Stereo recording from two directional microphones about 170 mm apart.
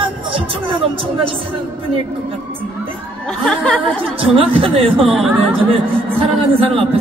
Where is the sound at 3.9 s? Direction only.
30° right (ahead or behind).